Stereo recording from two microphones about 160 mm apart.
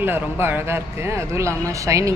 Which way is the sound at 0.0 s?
15° right (ahead or behind).